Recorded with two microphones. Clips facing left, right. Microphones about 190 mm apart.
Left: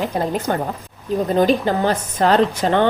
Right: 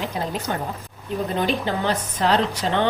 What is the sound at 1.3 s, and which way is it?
A woman's voice, 45° left (ahead or behind).